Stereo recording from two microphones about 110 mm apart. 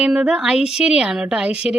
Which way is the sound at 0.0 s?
10° right (ahead or behind).